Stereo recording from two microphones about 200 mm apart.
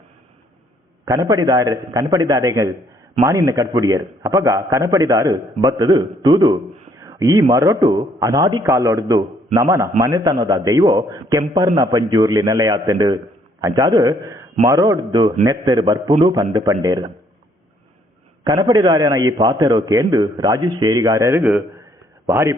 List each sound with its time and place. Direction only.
1.0 s a man's voice: 15° right (ahead or behind)
7.0 s a sound: 15° right (ahead or behind)
7.5 s a man's voice: 15° right (ahead or behind)
18.4 s a man's voice: 20° right (ahead or behind)